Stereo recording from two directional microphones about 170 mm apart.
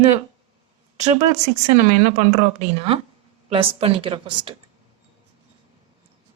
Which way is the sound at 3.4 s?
35° right (ahead or behind).